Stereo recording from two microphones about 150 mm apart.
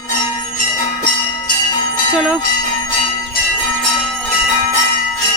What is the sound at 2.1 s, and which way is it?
Music, 5° right (ahead or behind).